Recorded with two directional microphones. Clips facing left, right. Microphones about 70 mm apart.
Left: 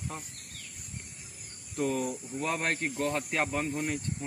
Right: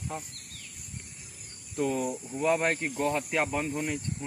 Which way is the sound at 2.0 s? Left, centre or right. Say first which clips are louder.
Right 2 dB; right.